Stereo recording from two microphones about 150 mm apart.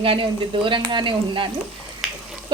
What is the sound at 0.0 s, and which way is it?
Stir, 35° right (ahead or behind).